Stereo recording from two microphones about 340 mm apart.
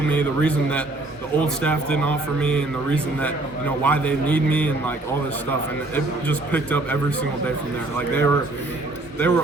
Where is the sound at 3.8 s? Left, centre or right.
Centre.